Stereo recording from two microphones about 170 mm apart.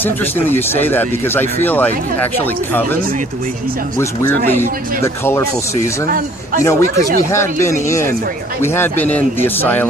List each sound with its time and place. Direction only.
0.0 s speech: 10° left (ahead or behind)
6.1 s a man's voice: 55° right (ahead or behind)
6.7 s speech: 20° left (ahead or behind)